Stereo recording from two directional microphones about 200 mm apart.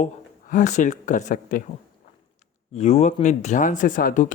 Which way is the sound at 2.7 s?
30° left (ahead or behind).